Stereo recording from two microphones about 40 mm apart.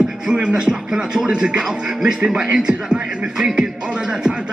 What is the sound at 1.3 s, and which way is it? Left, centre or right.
Speech, right.